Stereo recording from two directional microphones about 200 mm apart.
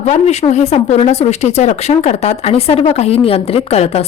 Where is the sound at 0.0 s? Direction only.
35° left (ahead or behind).